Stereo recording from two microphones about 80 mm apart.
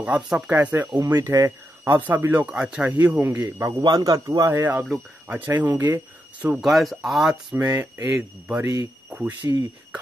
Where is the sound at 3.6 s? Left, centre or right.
Right.